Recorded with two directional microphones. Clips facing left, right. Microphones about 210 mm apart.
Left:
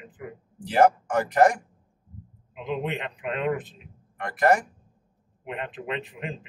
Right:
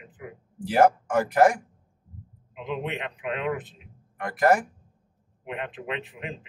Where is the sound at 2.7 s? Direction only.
40° left (ahead or behind).